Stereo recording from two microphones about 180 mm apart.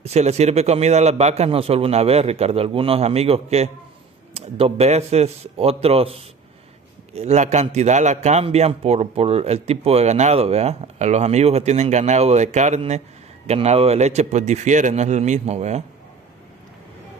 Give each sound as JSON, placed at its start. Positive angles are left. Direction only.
{"t": 0.0, "sound": "a man's voice", "side_deg": -35}